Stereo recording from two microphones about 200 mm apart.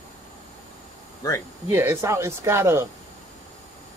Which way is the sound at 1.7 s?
10° right (ahead or behind).